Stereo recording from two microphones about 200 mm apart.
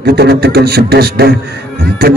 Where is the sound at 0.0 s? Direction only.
55° right (ahead or behind).